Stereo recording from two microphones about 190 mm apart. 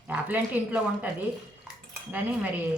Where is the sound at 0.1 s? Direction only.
10° right (ahead or behind).